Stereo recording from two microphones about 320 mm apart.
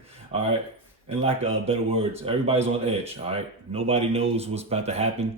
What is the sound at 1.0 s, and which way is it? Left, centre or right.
A man's voice, centre.